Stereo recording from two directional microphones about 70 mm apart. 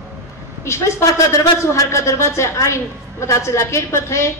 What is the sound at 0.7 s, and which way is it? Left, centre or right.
A man's voice, left.